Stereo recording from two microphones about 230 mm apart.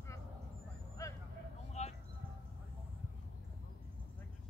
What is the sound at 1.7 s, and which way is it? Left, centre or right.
Vehicle, left.